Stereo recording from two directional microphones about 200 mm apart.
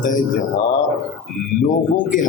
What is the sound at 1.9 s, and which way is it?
Speech, 40° left (ahead or behind).